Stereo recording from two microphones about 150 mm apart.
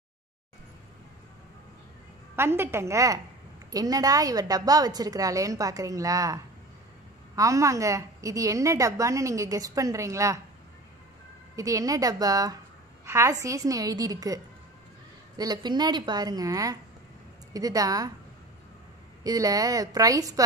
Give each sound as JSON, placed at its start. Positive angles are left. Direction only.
{"t": 2.3, "sound": "a woman's voice", "side_deg": -15}
{"t": 11.5, "sound": "a woman's voice", "side_deg": -25}
{"t": 19.2, "sound": "a woman's voice", "side_deg": -25}